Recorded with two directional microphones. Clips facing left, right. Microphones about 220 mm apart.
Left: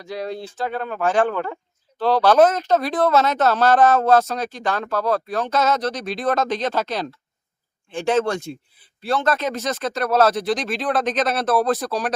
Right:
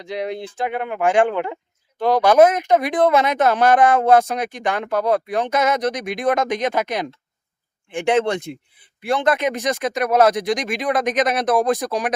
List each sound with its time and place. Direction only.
0.0 s speech: 20° right (ahead or behind)